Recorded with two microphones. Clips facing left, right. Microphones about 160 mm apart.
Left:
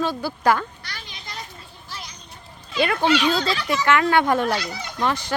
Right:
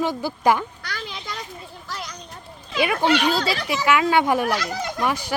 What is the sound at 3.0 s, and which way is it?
Speech, 10° right (ahead or behind).